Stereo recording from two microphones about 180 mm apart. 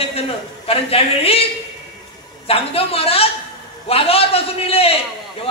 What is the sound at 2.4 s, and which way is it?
A man's voice, 30° left (ahead or behind).